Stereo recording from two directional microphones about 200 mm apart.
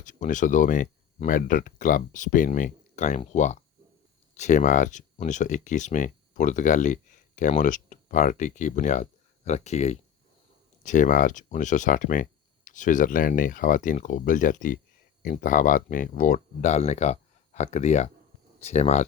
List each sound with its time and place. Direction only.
0.0 s speech: 40° left (ahead or behind)